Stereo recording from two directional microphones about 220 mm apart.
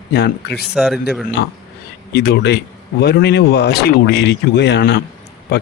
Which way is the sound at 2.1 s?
50° left (ahead or behind).